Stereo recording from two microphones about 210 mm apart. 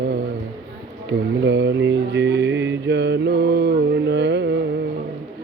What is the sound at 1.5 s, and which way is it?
Mantra, 55° right (ahead or behind).